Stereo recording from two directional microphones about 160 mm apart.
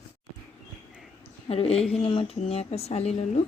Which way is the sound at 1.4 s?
40° left (ahead or behind).